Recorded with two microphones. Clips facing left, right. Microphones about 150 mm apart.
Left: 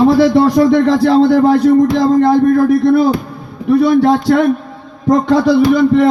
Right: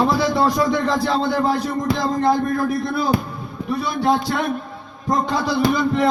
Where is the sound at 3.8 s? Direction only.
75° left (ahead or behind).